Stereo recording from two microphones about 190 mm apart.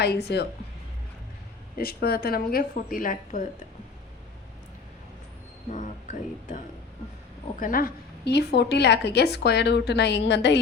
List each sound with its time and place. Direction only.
0.3 s a woman's voice: 60° left (ahead or behind)
1.8 s speech: 55° left (ahead or behind)
5.7 s speech: 40° left (ahead or behind)
7.6 s a woman's voice: 50° left (ahead or behind); by 10.6 s 65° left (ahead or behind)